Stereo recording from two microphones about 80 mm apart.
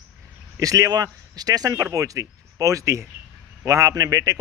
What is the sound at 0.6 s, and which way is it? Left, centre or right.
A man's voice, right.